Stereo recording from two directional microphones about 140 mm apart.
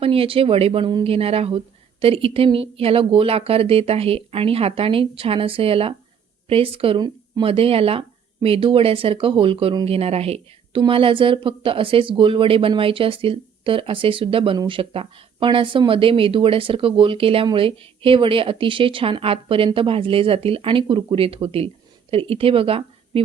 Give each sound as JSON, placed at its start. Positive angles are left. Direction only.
{"t": 0.0, "sound": "speech", "side_deg": -40}